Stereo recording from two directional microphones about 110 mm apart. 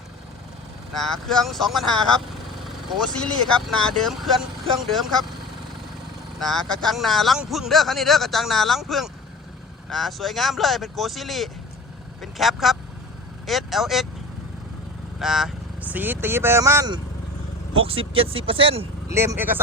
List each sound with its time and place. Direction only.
0.9 s speech: 5° left (ahead or behind)
3.2 s speech: 5° left (ahead or behind)
6.4 s a man's voice: centre (ahead or behind)
15.2 s speech: 5° right (ahead or behind)
15.8 s speech: 15° right (ahead or behind)
17.7 s speech: 60° right (ahead or behind)
19.0 s speech: 25° right (ahead or behind)